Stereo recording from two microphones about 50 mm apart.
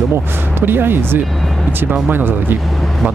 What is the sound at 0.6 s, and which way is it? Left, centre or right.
Speech, right.